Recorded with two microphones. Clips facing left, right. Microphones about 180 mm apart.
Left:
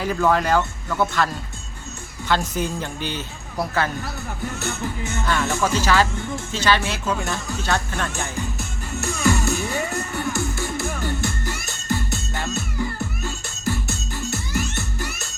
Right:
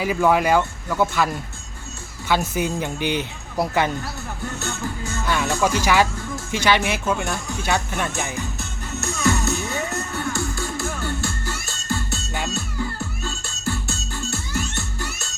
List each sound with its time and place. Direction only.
0.0 s a man's voice: 10° right (ahead or behind)
5.2 s a man's voice: 10° right (ahead or behind)
7.2 s speech: centre (ahead or behind)
7.5 s a man's voice: 10° right (ahead or behind)
8.9 s music: 10° left (ahead or behind)
13.7 s music: 15° left (ahead or behind)